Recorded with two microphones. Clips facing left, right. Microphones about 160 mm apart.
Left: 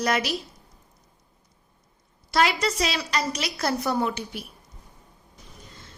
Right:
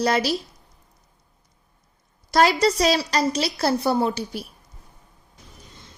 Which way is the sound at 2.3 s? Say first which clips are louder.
Right 5 dB; 40° right (ahead or behind).